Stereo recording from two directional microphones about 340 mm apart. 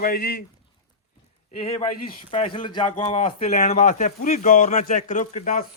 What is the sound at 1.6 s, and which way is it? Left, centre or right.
A man's voice, centre.